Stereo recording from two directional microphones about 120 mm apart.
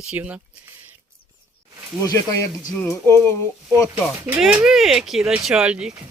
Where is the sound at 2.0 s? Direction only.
30° left (ahead or behind).